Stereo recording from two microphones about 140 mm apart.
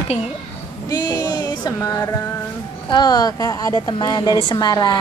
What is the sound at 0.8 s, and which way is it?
A woman's voice, 30° left (ahead or behind).